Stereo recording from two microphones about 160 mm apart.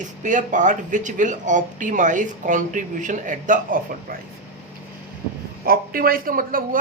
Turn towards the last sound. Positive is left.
turn(degrees=-65)  # may be behind; listen again after turning